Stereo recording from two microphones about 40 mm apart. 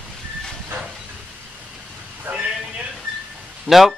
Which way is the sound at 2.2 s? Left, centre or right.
Right.